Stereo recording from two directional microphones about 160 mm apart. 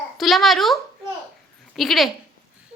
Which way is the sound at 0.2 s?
Centre (ahead or behind).